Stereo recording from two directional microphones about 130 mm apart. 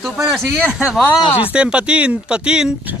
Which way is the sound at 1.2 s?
45° left (ahead or behind).